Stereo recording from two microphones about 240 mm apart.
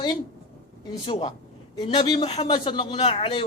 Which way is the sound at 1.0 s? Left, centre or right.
Left.